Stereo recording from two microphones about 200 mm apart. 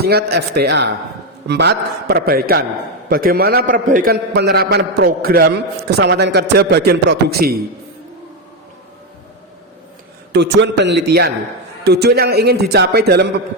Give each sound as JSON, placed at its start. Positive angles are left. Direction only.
{"t": 0.0, "sound": "a man's voice", "side_deg": -55}
{"t": 10.3, "sound": "a man's voice", "side_deg": -60}